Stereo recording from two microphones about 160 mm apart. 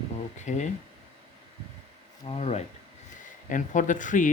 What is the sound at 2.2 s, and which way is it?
Speech, 40° left (ahead or behind).